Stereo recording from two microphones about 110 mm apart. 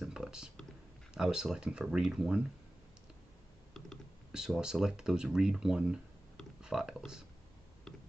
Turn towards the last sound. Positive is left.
turn(degrees=-5)  # may be behind; listen again after turning